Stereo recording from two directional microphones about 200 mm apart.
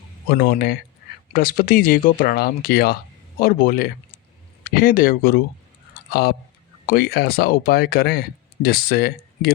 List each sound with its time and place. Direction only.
0.3 s speech: 50° left (ahead or behind)
6.8 s speech: 50° left (ahead or behind)